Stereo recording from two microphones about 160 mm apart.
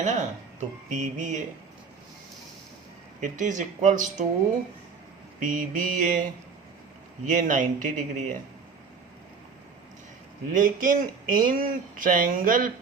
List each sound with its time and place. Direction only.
0.0 s speech: 50° right (ahead or behind)
3.2 s speech: 50° right (ahead or behind)
5.4 s speech: 55° right (ahead or behind)
7.3 s speech: 55° right (ahead or behind)
10.5 s speech: 55° right (ahead or behind)